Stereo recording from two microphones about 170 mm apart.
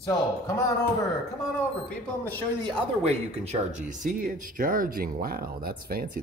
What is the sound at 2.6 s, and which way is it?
Speech, 40° right (ahead or behind).